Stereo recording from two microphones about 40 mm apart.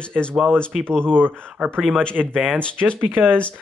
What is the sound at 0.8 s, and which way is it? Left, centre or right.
Speech, left.